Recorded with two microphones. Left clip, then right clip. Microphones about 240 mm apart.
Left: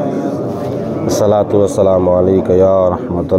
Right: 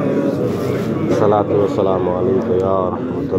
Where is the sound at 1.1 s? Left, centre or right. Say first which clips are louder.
Left 3 dB; left.